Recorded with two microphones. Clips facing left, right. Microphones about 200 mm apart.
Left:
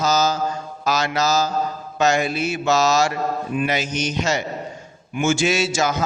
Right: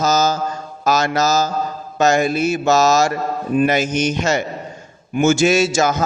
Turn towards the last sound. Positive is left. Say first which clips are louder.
# right 5 dB
turn(degrees=-45)  # may be behind; listen again after turning